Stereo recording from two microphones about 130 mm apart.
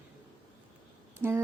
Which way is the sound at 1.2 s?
15° right (ahead or behind).